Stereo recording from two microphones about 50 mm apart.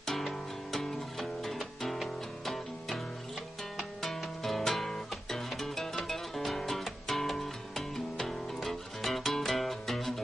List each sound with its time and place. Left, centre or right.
0.0 s music: centre
4.0 s music: centre